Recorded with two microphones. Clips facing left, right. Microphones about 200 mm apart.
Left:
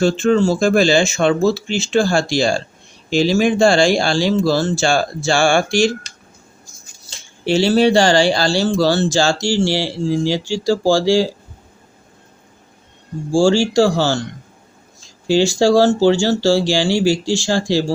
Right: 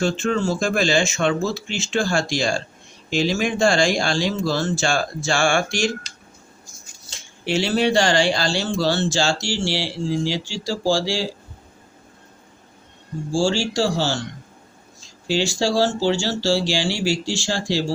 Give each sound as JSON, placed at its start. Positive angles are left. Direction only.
{"t": 0.0, "sound": "speech", "side_deg": 35}
{"t": 7.1, "sound": "speech", "side_deg": 30}
{"t": 13.3, "sound": "speech", "side_deg": 50}
{"t": 15.3, "sound": "speech", "side_deg": 50}